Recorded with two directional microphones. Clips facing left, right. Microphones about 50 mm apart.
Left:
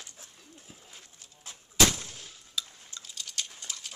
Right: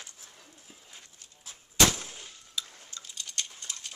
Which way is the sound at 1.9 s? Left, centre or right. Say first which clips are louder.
Right 1 dB; centre.